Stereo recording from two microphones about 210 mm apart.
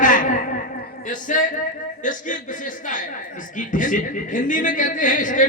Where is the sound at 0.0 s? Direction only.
40° left (ahead or behind).